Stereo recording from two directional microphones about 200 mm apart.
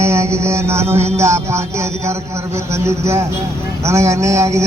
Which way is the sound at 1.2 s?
15° right (ahead or behind).